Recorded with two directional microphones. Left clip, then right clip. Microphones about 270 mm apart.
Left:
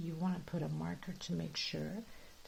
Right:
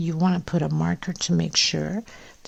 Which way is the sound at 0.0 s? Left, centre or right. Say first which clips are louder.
Right 16 dB; right.